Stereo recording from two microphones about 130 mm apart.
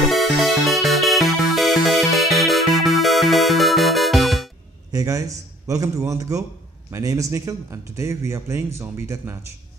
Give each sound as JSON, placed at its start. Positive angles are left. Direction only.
{"t": 0.0, "sound": "music", "side_deg": 0}
{"t": 4.9, "sound": "a man's voice", "side_deg": -25}